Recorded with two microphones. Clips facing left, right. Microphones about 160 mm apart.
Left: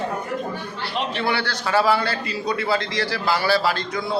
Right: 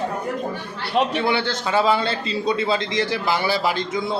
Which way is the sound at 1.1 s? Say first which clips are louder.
Right 3 dB; 20° right (ahead or behind).